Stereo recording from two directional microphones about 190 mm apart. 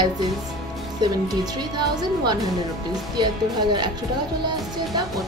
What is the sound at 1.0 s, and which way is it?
A woman's voice, 20° right (ahead or behind).